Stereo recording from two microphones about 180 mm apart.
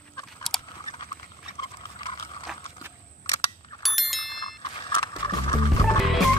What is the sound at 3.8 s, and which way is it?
Bicycle bell, centre (ahead or behind).